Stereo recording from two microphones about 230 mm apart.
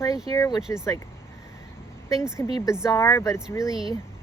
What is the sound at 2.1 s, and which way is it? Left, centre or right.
Speech, centre.